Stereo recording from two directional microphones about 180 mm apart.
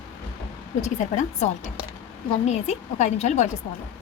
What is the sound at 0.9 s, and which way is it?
Speech, 40° left (ahead or behind).